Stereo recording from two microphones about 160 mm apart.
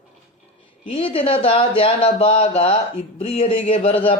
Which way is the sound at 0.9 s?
35° left (ahead or behind).